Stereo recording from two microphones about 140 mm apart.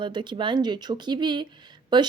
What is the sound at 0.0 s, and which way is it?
A woman's voice, 35° right (ahead or behind).